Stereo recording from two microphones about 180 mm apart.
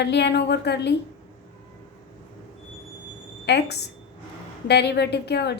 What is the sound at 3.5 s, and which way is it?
Speech, 70° left (ahead or behind).